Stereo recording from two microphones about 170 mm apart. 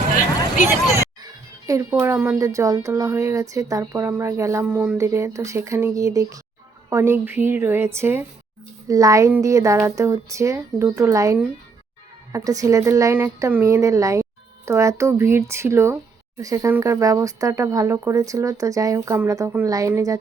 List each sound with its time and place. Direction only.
0.9 s speech: 20° right (ahead or behind)